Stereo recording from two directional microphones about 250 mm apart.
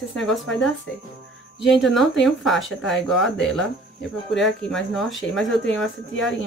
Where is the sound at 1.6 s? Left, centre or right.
Centre.